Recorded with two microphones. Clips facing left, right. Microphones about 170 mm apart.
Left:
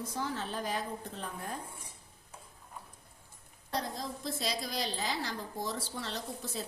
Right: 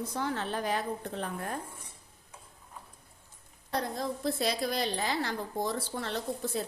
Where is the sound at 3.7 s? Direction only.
55° right (ahead or behind).